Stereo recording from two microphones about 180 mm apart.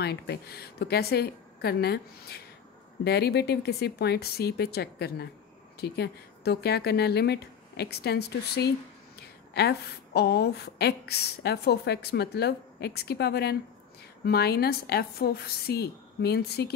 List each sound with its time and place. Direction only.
0.0 s a woman's voice: 65° left (ahead or behind)